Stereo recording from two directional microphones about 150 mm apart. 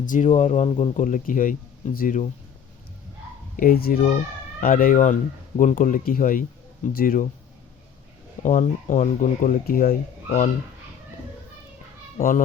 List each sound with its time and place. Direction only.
0.0 s speech: 60° left (ahead or behind); by 0.9 s 40° left (ahead or behind)
0.9 s speech: 60° left (ahead or behind)
3.6 s a child's voice: 75° left (ahead or behind)
4.6 s speech: 65° left (ahead or behind)
8.4 s speech: 55° left (ahead or behind)
12.1 s speech: 60° left (ahead or behind)